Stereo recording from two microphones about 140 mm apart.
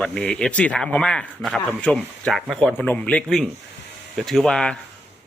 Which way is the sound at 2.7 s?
10° left (ahead or behind).